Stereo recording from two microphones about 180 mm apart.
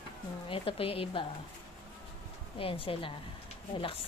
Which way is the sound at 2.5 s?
30° left (ahead or behind).